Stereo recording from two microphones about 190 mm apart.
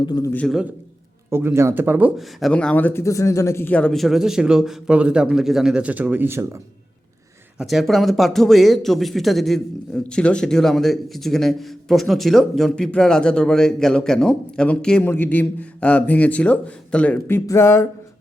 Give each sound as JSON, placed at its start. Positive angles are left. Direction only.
{"t": 0.0, "sound": "a man's voice", "side_deg": 20}
{"t": 0.4, "sound": "speech", "side_deg": 0}
{"t": 7.6, "sound": "speech", "side_deg": 0}